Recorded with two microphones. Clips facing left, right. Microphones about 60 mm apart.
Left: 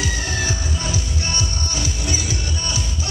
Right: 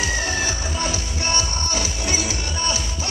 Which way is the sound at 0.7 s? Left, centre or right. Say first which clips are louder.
Right 1 dB; right.